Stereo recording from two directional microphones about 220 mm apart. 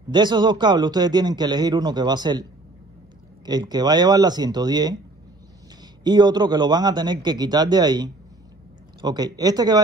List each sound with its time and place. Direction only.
0.1 s a man's voice: 20° right (ahead or behind)
3.4 s a man's voice: 20° right (ahead or behind)
6.0 s a man's voice: 20° right (ahead or behind)